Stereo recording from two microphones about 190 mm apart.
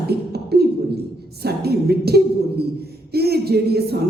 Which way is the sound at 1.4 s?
55° right (ahead or behind).